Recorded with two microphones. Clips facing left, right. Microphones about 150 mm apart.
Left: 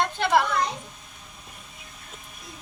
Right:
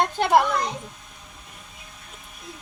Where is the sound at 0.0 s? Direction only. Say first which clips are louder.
Right 3 dB; 45° right (ahead or behind).